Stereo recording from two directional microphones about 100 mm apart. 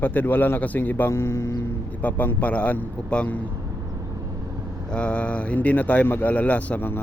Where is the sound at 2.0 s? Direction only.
15° left (ahead or behind).